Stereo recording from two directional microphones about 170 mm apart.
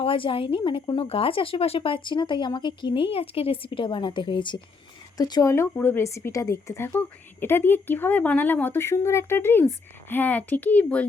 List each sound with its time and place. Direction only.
0.0 s speech: 30° left (ahead or behind); by 11.0 s 10° left (ahead or behind)